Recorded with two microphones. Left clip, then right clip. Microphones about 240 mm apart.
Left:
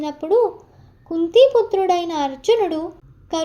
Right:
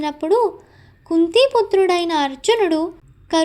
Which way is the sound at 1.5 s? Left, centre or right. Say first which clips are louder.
Even; right.